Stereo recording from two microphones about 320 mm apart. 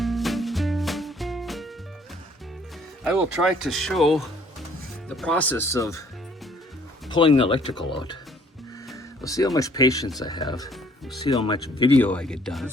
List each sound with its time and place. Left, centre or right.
0.0 s music: centre
3.0 s speech: centre
7.1 s speech: centre
9.2 s speech: centre
12.0 s speech: centre